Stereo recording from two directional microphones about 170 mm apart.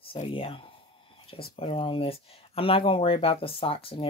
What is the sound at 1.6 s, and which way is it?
Speech, 30° left (ahead or behind).